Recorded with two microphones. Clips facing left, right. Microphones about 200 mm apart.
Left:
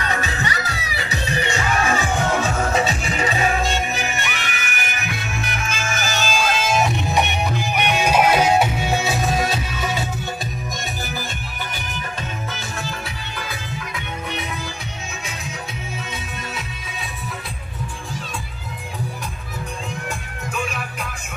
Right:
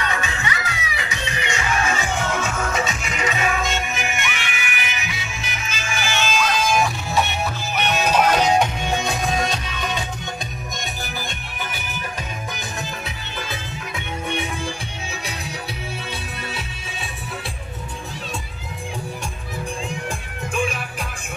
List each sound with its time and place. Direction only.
0.0 s music: 40° left (ahead or behind); by 10.0 s 5° left (ahead or behind)
13.9 s music: 30° right (ahead or behind)